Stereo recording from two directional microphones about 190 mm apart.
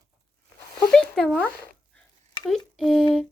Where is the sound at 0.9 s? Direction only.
5° left (ahead or behind).